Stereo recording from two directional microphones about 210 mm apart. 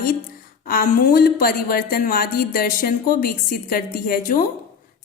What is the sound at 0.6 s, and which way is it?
A woman's voice, 40° left (ahead or behind).